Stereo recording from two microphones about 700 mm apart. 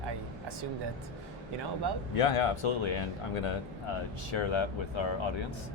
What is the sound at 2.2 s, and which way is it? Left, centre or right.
Speech, left.